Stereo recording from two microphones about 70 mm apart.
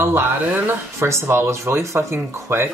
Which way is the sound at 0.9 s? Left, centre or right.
Right.